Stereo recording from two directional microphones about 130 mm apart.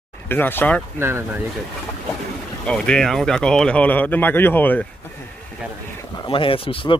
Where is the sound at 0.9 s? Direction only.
20° right (ahead or behind).